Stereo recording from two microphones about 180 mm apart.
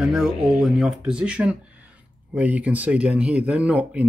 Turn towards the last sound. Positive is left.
turn(degrees=-10)  # may be behind; listen again after turning